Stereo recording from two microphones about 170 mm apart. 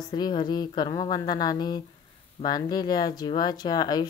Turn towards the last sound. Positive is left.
turn(degrees=25)  # may be behind; listen again after turning